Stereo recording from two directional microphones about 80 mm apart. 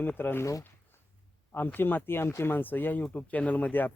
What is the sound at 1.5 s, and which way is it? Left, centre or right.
Speech, left.